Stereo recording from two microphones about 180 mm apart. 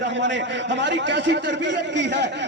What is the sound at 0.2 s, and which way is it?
A man's voice, 85° right.